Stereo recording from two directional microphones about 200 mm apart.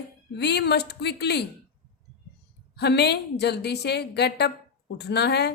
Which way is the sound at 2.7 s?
55° left (ahead or behind).